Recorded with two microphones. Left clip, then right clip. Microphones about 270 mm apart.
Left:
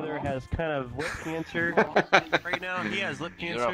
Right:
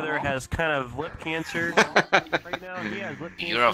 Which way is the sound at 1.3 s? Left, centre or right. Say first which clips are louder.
Right 3 dB; right.